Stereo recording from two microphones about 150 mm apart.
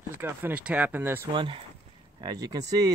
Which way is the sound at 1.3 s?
35° right (ahead or behind).